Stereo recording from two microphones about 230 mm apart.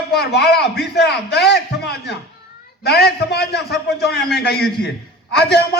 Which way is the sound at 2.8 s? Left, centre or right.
Left.